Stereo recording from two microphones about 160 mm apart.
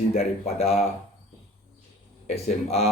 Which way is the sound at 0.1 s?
40° left (ahead or behind).